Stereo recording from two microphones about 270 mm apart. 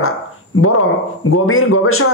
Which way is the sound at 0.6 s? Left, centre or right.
Left.